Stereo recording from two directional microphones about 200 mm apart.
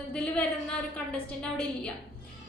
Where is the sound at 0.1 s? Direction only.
5° left (ahead or behind).